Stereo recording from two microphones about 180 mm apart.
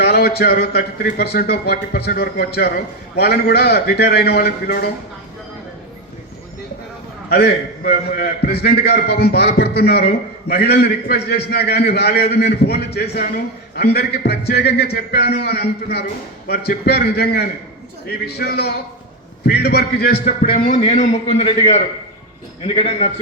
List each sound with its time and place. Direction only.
0.0 s a man's voice: 60° left (ahead or behind)
7.3 s a man's voice: 60° left (ahead or behind); by 23.1 s 35° left (ahead or behind)